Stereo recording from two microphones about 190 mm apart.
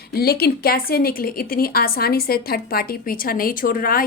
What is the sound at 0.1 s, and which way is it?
A woman's voice, 55° left (ahead or behind).